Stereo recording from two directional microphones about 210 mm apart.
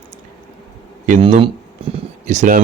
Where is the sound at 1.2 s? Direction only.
30° right (ahead or behind).